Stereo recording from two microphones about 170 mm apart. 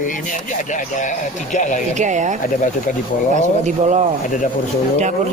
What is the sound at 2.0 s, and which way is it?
Speech, 45° right (ahead or behind).